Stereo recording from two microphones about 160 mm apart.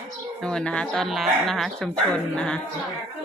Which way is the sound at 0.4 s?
5° left (ahead or behind).